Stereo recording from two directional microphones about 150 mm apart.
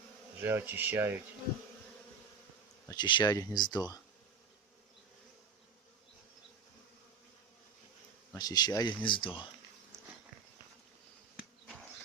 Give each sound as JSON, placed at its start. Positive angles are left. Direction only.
{"t": 0.3, "sound": "speech", "side_deg": -15}
{"t": 2.8, "sound": "speech", "side_deg": 30}
{"t": 8.3, "sound": "speech", "side_deg": 25}